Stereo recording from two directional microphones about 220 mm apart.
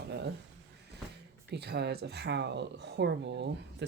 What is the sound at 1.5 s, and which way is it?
Speech, 50° right (ahead or behind).